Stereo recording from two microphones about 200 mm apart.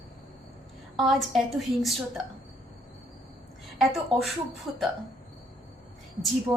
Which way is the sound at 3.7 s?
Centre (ahead or behind).